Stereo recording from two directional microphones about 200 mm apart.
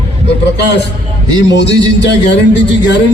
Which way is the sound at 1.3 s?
20° right (ahead or behind).